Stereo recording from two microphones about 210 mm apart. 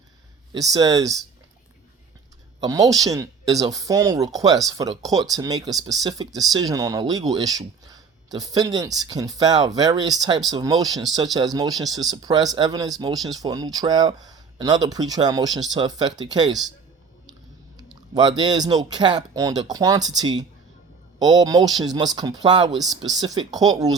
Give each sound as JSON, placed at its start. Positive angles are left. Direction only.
{"t": 0.5, "sound": "speech", "side_deg": -20}
{"t": 2.6, "sound": "speech", "side_deg": -15}
{"t": 18.1, "sound": "speech", "side_deg": -20}